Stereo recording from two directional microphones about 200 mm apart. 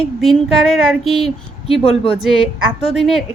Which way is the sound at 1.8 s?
30° left (ahead or behind).